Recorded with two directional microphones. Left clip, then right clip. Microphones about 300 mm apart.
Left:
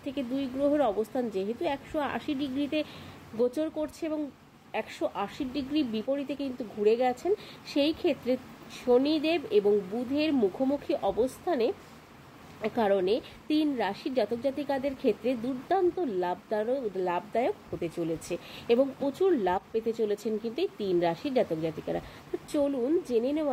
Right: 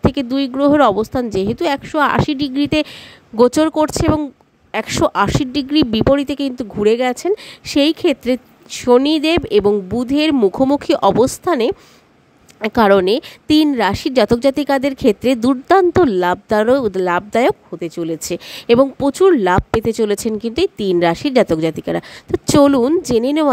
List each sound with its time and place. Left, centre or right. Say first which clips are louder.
0.0 s a woman's voice: right 16 dB; right